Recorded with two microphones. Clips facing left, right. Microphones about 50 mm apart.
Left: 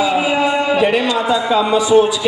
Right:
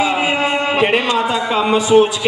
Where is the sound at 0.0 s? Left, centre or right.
Right.